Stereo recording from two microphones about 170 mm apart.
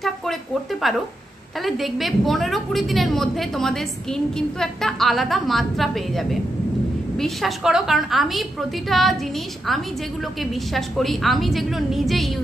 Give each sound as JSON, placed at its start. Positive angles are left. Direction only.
{"t": 0.9, "sound": "a woman's voice", "side_deg": 0}
{"t": 10.4, "sound": "a woman's voice", "side_deg": 0}